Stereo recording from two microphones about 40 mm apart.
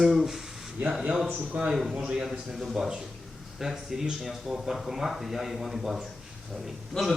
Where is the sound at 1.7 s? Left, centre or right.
Centre.